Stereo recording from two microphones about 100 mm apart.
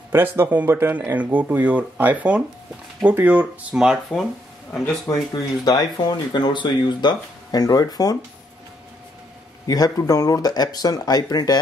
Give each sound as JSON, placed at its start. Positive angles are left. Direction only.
{"t": 0.1, "sound": "speech", "side_deg": -20}
{"t": 3.7, "sound": "speech", "side_deg": -5}
{"t": 5.3, "sound": "speech", "side_deg": 45}
{"t": 9.7, "sound": "speech", "side_deg": 35}